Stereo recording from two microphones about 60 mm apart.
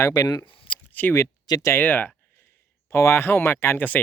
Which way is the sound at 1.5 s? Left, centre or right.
Left.